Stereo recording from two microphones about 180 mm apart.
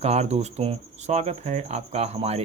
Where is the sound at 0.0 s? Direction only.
35° right (ahead or behind).